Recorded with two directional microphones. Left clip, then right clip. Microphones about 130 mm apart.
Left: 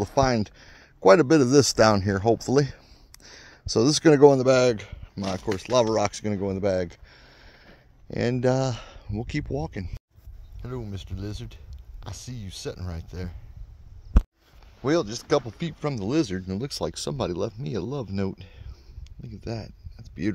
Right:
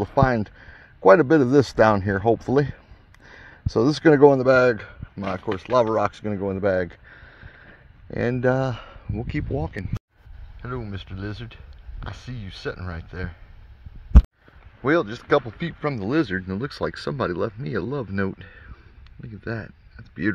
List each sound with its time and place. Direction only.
0.0 s speech: 45° left (ahead or behind)
6.5 s a sound: 30° left (ahead or behind)
9.5 s speech: 25° left (ahead or behind)
14.8 s speech: 25° left (ahead or behind)